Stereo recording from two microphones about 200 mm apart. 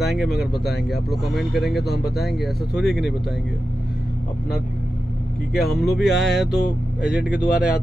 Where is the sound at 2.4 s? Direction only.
Centre (ahead or behind).